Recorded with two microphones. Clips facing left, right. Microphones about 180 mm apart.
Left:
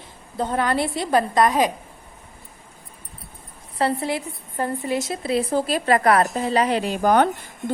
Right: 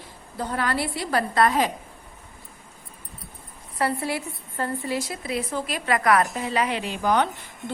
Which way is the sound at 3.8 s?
25° left (ahead or behind).